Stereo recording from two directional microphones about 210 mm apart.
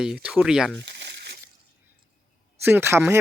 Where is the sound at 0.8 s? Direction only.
55° right (ahead or behind).